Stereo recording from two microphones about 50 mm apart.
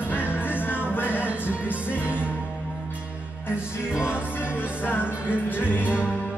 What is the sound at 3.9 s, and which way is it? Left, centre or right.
Music, centre.